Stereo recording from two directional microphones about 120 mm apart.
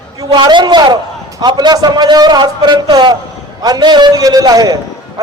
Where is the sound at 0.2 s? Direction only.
40° right (ahead or behind).